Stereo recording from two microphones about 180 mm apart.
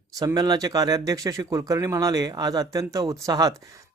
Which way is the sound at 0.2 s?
20° right (ahead or behind).